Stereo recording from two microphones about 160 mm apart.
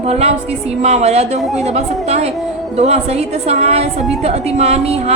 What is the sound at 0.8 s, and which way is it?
A woman's voice, 45° right (ahead or behind).